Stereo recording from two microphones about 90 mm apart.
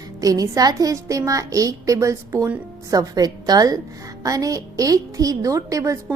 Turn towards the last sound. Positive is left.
turn(degrees=-35)  # may be behind; listen again after turning